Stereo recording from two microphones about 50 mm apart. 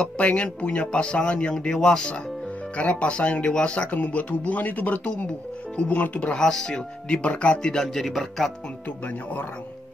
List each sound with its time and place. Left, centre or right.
0.0 s speech: left
1.5 s speech: centre
2.8 s speech: left
6.3 s speech: centre
9.0 s speech: left